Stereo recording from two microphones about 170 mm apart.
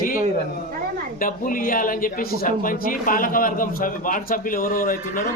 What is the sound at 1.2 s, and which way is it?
Speech, 55° left (ahead or behind).